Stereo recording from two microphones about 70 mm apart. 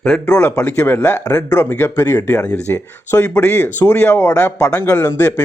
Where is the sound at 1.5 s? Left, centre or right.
Left.